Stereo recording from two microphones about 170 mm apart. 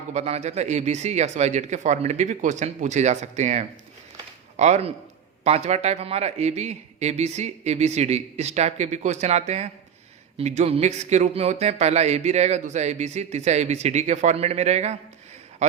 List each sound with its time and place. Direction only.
0.1 s speech: 40° right (ahead or behind)